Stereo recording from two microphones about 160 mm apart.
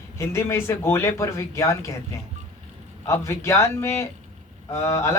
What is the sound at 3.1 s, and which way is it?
Speech, 15° left (ahead or behind).